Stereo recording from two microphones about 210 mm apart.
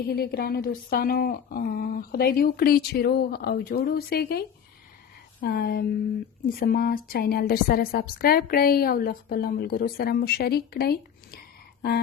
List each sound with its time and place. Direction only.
0.1 s a woman's voice: 45° left (ahead or behind)